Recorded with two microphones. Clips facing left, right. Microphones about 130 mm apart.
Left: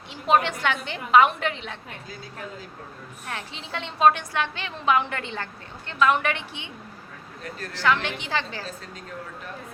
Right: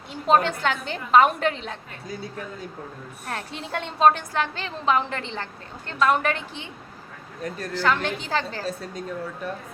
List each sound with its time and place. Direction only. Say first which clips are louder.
0.1 s a woman's voice: right 1 dB; 40° right (ahead or behind)
3.2 s a woman's voice: right 3 dB; 40° right (ahead or behind)
3.6 s a woman's voice: right 3 dB; 50° right (ahead or behind)
4.0 s a woman's voice: right 1 dB; 40° right (ahead or behind)
5.9 s a woman's voice: even; 40° right (ahead or behind)
7.8 s a woman's voice: even; 40° right (ahead or behind)